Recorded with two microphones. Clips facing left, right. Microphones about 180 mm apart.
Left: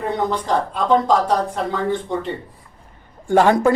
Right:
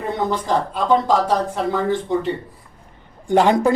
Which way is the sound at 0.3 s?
5° right (ahead or behind).